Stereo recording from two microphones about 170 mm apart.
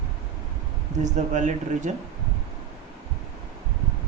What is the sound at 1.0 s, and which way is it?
Speech, 45° right (ahead or behind).